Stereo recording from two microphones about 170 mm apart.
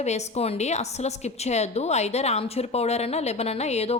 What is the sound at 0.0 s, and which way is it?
A woman's voice, 40° left (ahead or behind).